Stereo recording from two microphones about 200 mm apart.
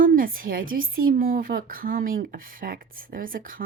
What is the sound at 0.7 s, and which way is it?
Speech, 45° right (ahead or behind).